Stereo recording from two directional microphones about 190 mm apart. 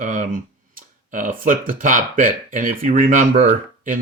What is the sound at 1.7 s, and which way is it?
Speech, 45° right (ahead or behind).